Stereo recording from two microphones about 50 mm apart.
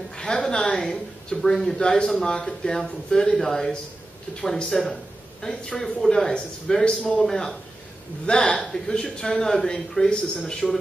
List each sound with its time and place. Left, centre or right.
0.1 s a sound: centre
0.6 s speech: centre
1.5 s a man's voice: centre